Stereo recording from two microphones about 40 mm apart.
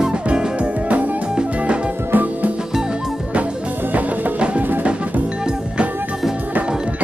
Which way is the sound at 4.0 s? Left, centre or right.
Right.